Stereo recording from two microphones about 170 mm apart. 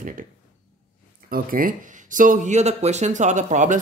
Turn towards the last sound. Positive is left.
turn(degrees=-45)  # may be behind; listen again after turning